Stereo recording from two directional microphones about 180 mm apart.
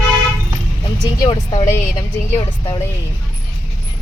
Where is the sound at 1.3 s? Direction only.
20° left (ahead or behind).